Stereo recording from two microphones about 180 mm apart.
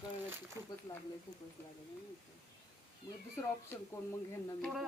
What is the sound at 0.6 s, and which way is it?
Speech, 15° right (ahead or behind).